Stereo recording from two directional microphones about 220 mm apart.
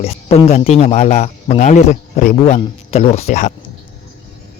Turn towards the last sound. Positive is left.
turn(degrees=30)  # may be behind; listen again after turning